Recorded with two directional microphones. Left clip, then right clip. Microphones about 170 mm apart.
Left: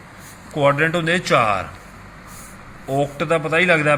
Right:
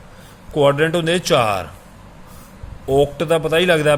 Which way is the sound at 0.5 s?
90° right.